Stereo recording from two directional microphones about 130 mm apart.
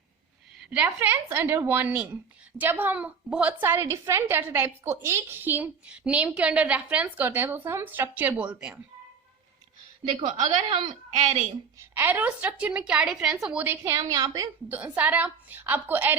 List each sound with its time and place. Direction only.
0.7 s a woman's voice: 15° right (ahead or behind)
10.1 s a woman's voice: 40° right (ahead or behind)
11.8 s a woman's voice: 15° right (ahead or behind)
14.1 s a woman's voice: 30° right (ahead or behind)
14.7 s a woman's voice: 10° right (ahead or behind)